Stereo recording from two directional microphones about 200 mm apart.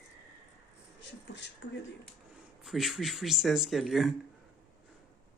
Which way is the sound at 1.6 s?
65° left (ahead or behind).